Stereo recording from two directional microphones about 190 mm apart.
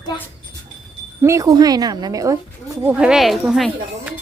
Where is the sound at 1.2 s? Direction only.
15° right (ahead or behind).